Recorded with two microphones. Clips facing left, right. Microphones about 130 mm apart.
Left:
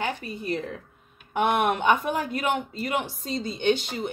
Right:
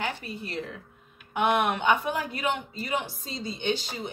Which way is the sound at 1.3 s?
50° left (ahead or behind).